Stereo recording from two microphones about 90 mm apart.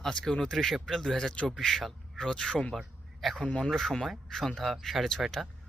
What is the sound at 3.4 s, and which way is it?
Speech, 10° left (ahead or behind).